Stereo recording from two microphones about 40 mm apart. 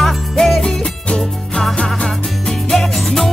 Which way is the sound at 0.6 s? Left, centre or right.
Centre.